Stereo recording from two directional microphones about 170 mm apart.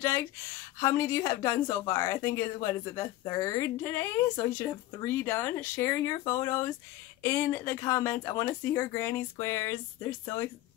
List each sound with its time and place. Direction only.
0.0 s speech: 15° left (ahead or behind)